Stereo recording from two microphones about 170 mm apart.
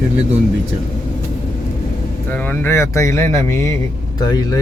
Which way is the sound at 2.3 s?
10° left (ahead or behind).